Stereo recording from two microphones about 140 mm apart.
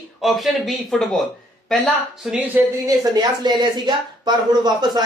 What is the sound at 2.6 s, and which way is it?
A woman's voice, 25° right (ahead or behind).